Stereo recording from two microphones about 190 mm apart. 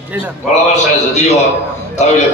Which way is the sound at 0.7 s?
35° left (ahead or behind).